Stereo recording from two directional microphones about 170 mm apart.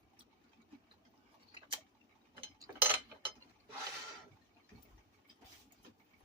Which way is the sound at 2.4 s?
15° right (ahead or behind).